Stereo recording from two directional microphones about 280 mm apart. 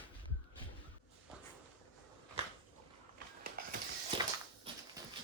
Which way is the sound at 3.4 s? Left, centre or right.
Right.